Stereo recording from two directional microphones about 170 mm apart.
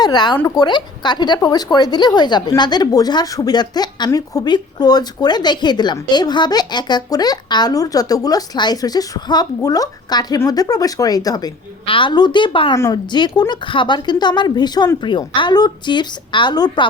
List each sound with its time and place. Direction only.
0.0 s speech: 25° left (ahead or behind)